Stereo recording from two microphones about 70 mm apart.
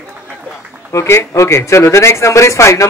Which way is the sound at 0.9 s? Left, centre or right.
Left.